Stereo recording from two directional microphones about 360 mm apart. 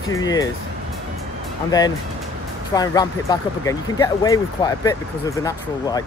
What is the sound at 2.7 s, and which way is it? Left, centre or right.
Speech, centre.